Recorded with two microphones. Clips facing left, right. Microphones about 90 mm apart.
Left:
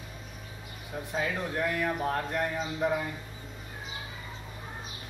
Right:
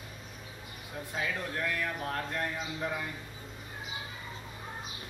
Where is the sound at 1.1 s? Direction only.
20° left (ahead or behind).